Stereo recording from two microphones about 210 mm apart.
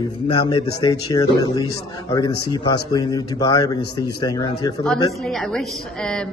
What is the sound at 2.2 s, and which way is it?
Speech, 90° left.